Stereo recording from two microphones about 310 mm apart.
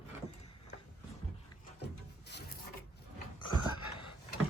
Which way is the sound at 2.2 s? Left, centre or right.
Left.